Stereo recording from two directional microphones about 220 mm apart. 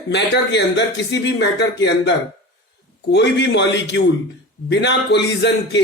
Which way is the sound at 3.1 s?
50° left (ahead or behind).